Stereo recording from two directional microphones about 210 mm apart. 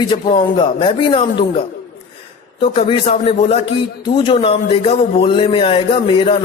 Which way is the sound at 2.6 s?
25° left (ahead or behind).